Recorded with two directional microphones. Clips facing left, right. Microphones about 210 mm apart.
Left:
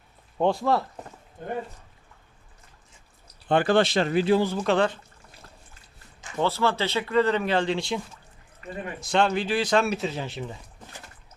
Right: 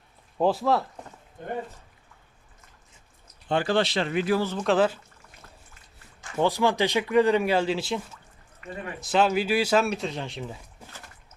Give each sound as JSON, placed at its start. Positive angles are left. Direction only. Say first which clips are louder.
{"t": 0.3, "sound": "speech", "louder": "even", "side_deg": -5}
{"t": 3.5, "sound": "speech", "louder": "left 3 dB", "side_deg": 55}
{"t": 4.4, "sound": "speech", "louder": "left 3 dB", "side_deg": 10}
{"t": 4.6, "sound": "speech", "louder": "right 1 dB", "side_deg": -5}
{"t": 6.3, "sound": "speech", "louder": "right 2 dB", "side_deg": -15}
{"t": 8.6, "sound": "speech", "louder": "left 1 dB", "side_deg": 35}
{"t": 9.0, "sound": "speech", "louder": "right 1 dB", "side_deg": -5}